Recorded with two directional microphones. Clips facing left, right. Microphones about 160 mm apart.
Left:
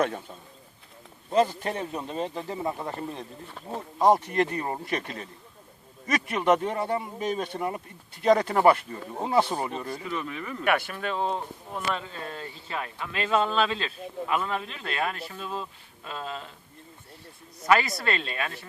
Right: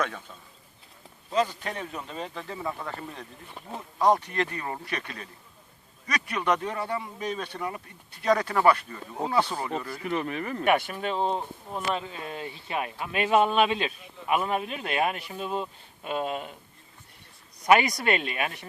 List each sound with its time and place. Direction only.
1.4 s speech: 30° left (ahead or behind)
10.0 s speech: 60° right (ahead or behind)
10.7 s speech: 20° right (ahead or behind)
17.7 s speech: 15° right (ahead or behind)